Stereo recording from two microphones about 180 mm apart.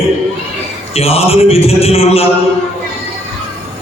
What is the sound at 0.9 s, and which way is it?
A man's voice, 35° left (ahead or behind).